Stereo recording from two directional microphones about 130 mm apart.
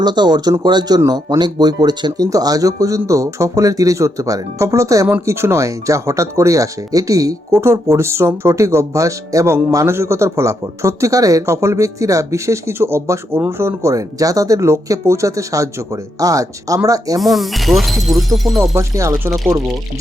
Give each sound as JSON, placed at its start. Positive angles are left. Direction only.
{"t": 0.0, "sound": "speech", "side_deg": -35}
{"t": 17.2, "sound": "speech", "side_deg": 0}
{"t": 18.7, "sound": "speech", "side_deg": -20}